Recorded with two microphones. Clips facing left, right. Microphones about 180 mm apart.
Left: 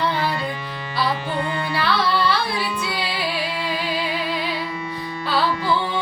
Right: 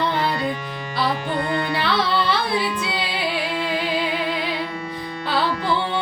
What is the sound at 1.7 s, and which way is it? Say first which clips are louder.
Carnatic music: left 3 dB; 20° right (ahead or behind).